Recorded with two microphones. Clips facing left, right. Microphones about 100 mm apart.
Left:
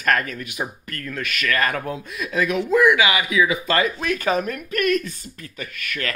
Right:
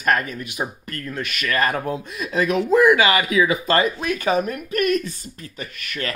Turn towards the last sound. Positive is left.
turn(degrees=-25)  # may be behind; listen again after turning